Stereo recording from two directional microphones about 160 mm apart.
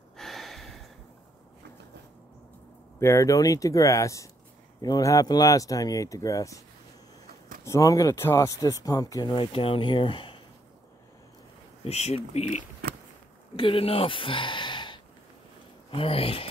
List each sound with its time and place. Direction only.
0.2 s a sound: centre (ahead or behind)
3.0 s speech: 15° left (ahead or behind)
7.6 s speech: 20° left (ahead or behind)
11.8 s speech: 40° left (ahead or behind)
13.6 s speech: 35° left (ahead or behind)